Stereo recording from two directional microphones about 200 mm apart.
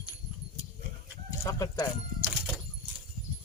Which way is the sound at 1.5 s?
15° left (ahead or behind).